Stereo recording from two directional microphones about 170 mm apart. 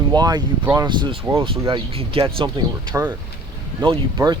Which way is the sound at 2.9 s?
10° right (ahead or behind).